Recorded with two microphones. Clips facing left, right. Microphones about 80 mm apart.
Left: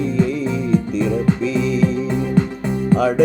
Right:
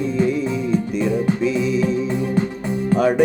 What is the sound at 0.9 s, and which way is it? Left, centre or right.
Music, left.